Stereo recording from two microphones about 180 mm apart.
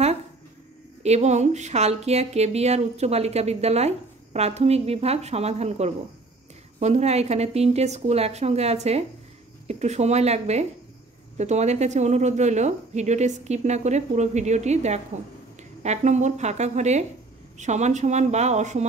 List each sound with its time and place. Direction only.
1.0 s speech: 40° right (ahead or behind)